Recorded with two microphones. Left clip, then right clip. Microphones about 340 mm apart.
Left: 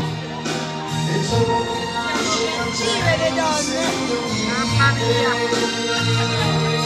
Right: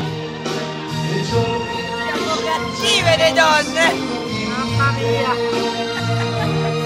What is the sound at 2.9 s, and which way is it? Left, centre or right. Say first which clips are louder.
Music: right 7 dB; right.